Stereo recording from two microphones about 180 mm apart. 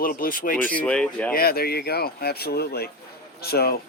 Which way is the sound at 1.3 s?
60° left (ahead or behind).